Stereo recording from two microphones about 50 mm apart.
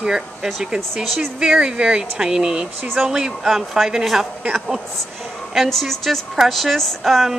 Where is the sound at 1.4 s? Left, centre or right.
Centre.